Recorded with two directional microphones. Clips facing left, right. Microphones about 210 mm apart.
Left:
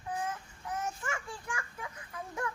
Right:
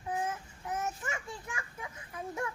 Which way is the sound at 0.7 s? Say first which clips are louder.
Right 1 dB; 20° right (ahead or behind).